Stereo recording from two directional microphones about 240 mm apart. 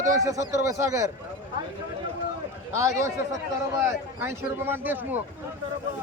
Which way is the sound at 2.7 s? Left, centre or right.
Centre.